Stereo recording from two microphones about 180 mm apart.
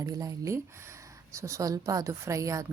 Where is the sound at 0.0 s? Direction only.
20° right (ahead or behind).